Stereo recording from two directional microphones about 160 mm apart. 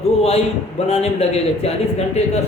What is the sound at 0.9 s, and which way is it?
Speech, 40° left (ahead or behind).